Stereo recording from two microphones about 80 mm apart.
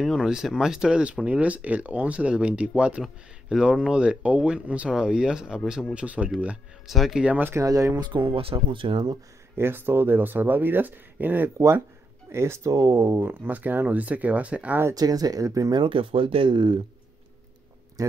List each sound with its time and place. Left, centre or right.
0.0 s speech: centre
6.9 s speech: centre
7.2 s speech: right
7.5 s speech: right
8.0 s speech: right
9.6 s speech: right
11.5 s speech: right; by 14.8 s centre
15.0 s speech: right
15.7 s speech: right